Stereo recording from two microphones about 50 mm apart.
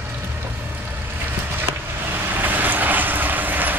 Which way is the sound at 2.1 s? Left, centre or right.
Right.